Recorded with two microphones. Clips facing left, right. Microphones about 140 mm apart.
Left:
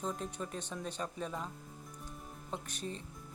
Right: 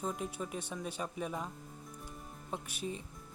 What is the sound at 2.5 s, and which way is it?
Speech, 10° right (ahead or behind).